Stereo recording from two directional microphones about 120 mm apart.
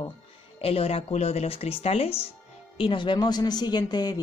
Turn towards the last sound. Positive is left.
turn(degrees=35)  # may be behind; listen again after turning